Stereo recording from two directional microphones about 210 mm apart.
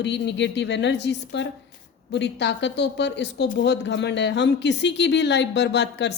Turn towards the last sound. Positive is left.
turn(degrees=55)  # may be behind; listen again after turning